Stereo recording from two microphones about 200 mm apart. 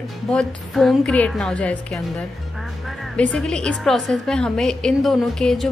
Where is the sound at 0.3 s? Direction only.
5° left (ahead or behind).